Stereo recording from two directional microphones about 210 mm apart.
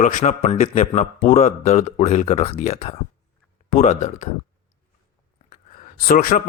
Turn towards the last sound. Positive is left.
turn(degrees=45)  # may be behind; listen again after turning